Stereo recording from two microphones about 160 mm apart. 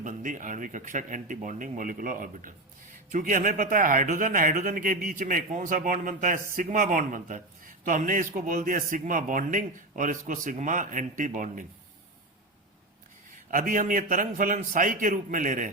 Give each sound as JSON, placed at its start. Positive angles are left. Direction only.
{"t": 0.0, "sound": "speech", "side_deg": -55}
{"t": 13.5, "sound": "speech", "side_deg": -55}